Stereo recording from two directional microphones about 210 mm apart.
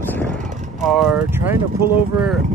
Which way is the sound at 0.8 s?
Centre (ahead or behind).